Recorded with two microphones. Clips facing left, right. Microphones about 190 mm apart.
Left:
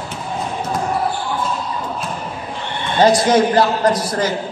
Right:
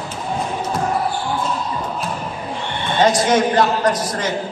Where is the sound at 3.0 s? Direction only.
35° left (ahead or behind).